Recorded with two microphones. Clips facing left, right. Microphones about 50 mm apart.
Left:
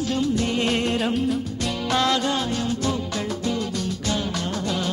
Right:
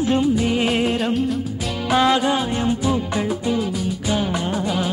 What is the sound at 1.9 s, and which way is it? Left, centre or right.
Music, centre.